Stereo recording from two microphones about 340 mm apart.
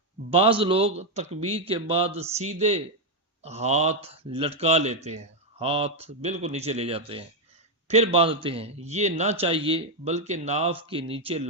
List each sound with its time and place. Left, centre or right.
0.3 s speech: centre